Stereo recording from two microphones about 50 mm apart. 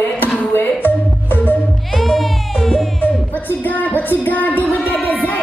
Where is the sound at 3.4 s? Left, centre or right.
Left.